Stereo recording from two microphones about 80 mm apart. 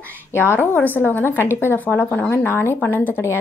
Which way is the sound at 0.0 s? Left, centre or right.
Left.